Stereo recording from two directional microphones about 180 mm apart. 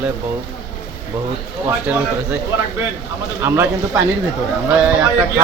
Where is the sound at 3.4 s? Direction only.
15° right (ahead or behind).